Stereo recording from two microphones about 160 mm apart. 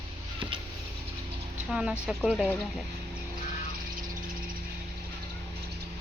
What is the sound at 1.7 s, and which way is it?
Speech, 5° right (ahead or behind).